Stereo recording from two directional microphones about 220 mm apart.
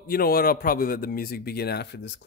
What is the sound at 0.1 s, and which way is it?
A man's voice, 40° left (ahead or behind).